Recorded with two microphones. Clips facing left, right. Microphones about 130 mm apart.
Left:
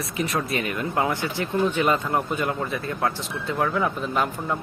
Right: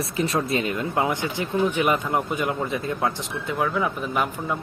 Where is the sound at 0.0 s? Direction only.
30° right (ahead or behind).